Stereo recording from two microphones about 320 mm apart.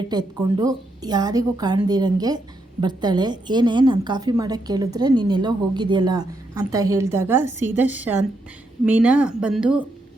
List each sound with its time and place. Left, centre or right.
0.1 s a woman's voice: centre